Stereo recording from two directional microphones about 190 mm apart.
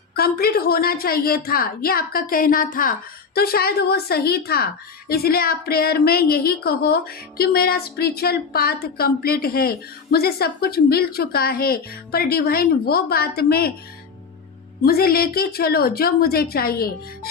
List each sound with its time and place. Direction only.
0.1 s a woman's voice: 55° left (ahead or behind)
14.8 s a woman's voice: 55° left (ahead or behind)